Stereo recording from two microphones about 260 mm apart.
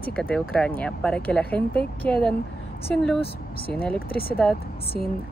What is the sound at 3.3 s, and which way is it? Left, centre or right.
Speech, left.